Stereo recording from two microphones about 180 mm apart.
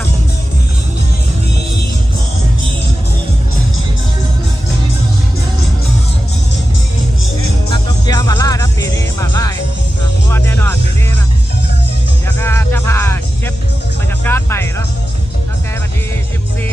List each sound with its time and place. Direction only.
7.7 s music: 20° left (ahead or behind)
12.4 s music: 15° left (ahead or behind)